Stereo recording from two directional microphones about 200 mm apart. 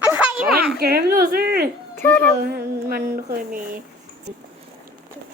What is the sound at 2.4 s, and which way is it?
A child's voice, 50° right (ahead or behind).